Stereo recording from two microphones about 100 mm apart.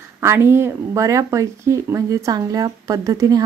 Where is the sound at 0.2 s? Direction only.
25° right (ahead or behind).